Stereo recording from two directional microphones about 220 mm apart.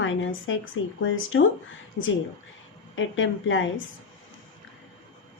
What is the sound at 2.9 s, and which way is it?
Speech, 60° left (ahead or behind).